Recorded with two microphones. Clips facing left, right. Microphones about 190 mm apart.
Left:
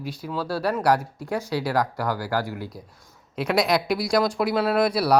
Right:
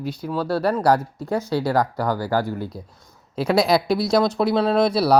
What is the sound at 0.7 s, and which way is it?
Speech, 25° right (ahead or behind).